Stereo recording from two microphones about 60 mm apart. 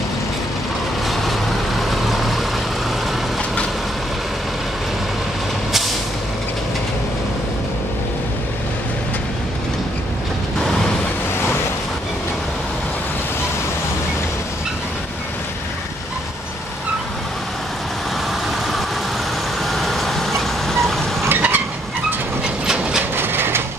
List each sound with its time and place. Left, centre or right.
1.0 s vehicle: centre
19.6 s vehicle: centre
21.3 s vehicle: right
22.4 s train: centre
23.1 s a sound: right